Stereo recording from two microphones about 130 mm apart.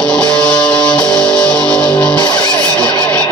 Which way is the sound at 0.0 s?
5° left (ahead or behind).